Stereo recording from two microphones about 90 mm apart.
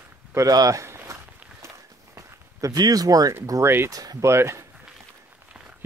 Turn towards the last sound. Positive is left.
turn(degrees=-30)  # may be behind; listen again after turning